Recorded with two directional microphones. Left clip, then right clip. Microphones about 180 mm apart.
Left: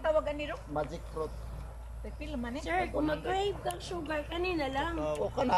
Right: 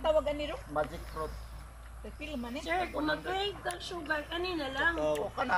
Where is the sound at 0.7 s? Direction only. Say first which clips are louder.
Right 1 dB; 15° left (ahead or behind).